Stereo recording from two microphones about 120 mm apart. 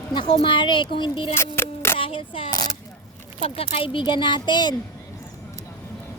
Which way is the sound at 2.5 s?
35° left (ahead or behind).